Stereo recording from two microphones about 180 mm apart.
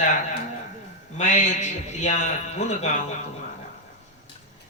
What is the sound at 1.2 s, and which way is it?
A man's voice, 40° left (ahead or behind).